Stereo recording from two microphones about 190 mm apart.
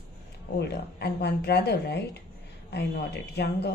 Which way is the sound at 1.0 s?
60° left (ahead or behind).